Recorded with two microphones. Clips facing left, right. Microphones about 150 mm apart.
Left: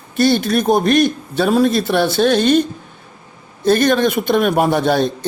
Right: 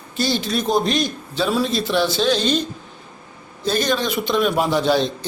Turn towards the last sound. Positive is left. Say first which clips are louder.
# left 3 dB
turn(degrees=55)  # may be behind; listen again after turning